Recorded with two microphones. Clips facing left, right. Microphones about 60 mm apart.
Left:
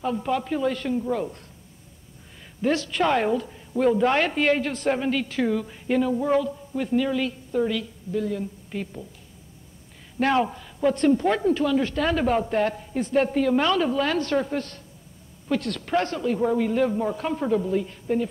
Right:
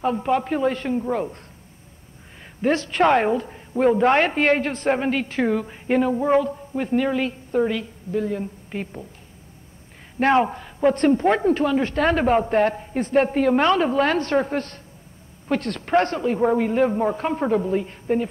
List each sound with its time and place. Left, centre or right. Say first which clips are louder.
0.0 s speech: right 4 dB; right
2.4 s speech: right 3 dB; right
10.1 s speech: right 4 dB; right